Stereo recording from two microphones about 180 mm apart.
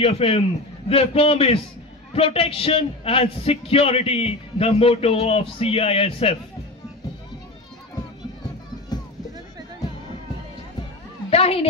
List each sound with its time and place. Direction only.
0.0 s a man's voice: 35° left (ahead or behind)
8.9 s boat: 20° left (ahead or behind)
11.2 s a sound: 35° left (ahead or behind)